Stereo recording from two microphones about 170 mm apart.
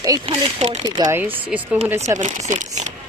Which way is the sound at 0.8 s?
20° right (ahead or behind).